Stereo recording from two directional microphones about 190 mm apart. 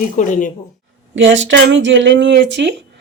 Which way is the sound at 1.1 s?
80° right.